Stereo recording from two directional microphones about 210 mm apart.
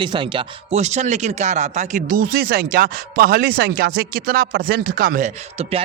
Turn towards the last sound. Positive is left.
turn(degrees=-30)  # may be behind; listen again after turning